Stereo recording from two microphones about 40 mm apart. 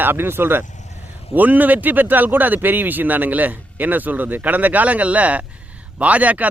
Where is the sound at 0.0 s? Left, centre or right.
Right.